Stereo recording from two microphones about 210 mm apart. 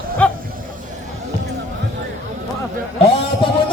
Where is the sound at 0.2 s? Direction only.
5° left (ahead or behind).